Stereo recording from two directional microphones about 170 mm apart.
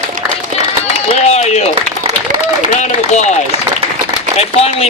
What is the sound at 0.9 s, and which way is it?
Speech, 40° left (ahead or behind).